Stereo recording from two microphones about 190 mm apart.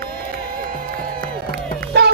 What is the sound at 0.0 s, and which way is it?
Crowd, 50° right (ahead or behind).